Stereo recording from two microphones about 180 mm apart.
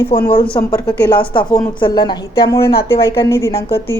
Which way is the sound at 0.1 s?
30° left (ahead or behind).